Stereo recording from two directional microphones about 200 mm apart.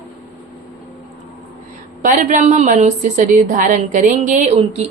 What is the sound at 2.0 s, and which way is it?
A woman's voice, 40° right (ahead or behind).